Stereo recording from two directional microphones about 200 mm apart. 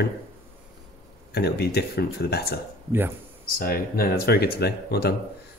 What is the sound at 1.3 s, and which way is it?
Speech, 55° left (ahead or behind).